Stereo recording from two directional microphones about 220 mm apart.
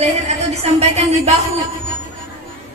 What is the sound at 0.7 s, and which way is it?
Speech, 30° right (ahead or behind).